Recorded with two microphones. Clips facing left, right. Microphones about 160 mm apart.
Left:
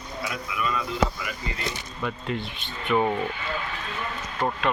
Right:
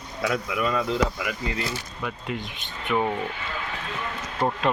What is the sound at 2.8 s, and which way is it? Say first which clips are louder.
Speech: left 2 dB; centre (ahead or behind).